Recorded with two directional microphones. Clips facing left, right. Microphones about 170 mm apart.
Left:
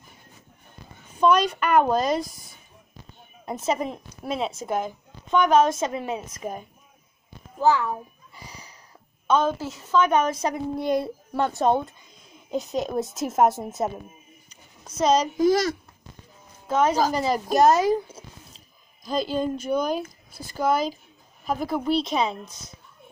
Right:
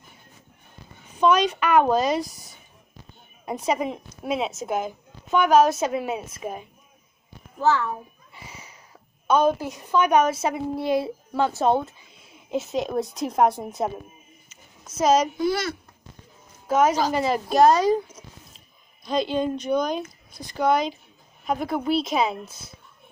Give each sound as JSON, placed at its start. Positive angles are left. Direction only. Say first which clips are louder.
{"t": 1.5, "sound": "speech", "louder": "right 1 dB", "side_deg": -5}
{"t": 3.4, "sound": "speech", "louder": "right 1 dB", "side_deg": -10}
{"t": 7.6, "sound": "a child's voice", "louder": "left 1 dB", "side_deg": 15}
{"t": 8.4, "sound": "a sound", "louder": "even", "side_deg": -5}
{"t": 9.3, "sound": "speech", "louder": "right 2 dB", "side_deg": -15}
{"t": 15.0, "sound": "speech", "louder": "right 1 dB", "side_deg": -5}
{"t": 15.3, "sound": "a child's voice", "louder": "left 4 dB", "side_deg": 40}
{"t": 16.6, "sound": "a woman's voice", "louder": "right 1 dB", "side_deg": -10}
{"t": 19.0, "sound": "speech", "louder": "right 1 dB", "side_deg": 5}